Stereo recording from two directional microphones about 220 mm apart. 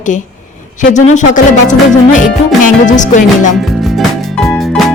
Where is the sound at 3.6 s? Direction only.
Centre (ahead or behind).